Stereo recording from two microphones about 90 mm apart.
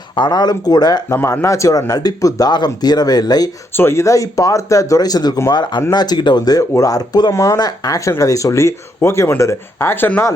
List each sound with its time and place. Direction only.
0.2 s speech: 50° left (ahead or behind)
1.1 s speech: 30° left (ahead or behind)
1.9 s speech: 45° left (ahead or behind)
3.8 s speech: 30° left (ahead or behind)